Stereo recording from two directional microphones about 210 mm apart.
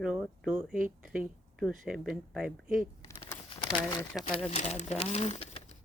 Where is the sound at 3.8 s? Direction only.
15° left (ahead or behind).